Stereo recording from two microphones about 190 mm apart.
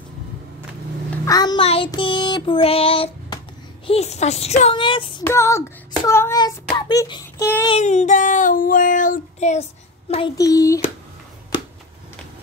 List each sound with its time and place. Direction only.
1.2 s a child's voice: 20° left (ahead or behind)
1.9 s child singing: 25° left (ahead or behind)
5.2 s child singing: 15° left (ahead or behind)
7.8 s child singing: 40° left (ahead or behind)
10.3 s child singing: 15° left (ahead or behind)